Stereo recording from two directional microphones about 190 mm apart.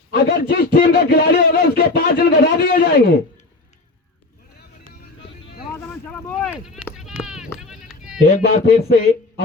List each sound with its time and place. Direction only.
0.1 s a man's voice: 50° left (ahead or behind)
5.7 s a sound: 10° left (ahead or behind)
6.9 s sheep: centre (ahead or behind)
8.2 s a man's voice: 55° left (ahead or behind)